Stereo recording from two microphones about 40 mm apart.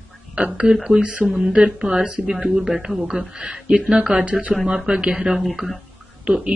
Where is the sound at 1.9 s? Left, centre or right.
Right.